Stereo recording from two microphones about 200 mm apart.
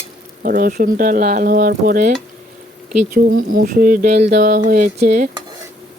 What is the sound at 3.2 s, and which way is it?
Speech, 45° right (ahead or behind).